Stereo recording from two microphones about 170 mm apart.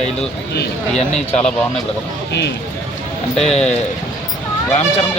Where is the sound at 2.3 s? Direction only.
80° left.